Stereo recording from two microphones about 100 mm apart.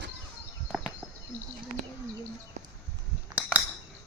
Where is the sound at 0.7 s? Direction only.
5° right (ahead or behind).